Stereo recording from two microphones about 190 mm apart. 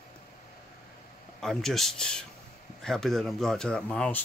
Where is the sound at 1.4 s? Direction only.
Centre (ahead or behind).